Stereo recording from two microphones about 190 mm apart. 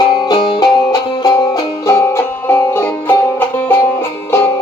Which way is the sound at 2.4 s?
10° left (ahead or behind).